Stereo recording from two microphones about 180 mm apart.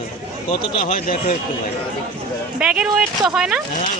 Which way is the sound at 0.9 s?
50° left (ahead or behind).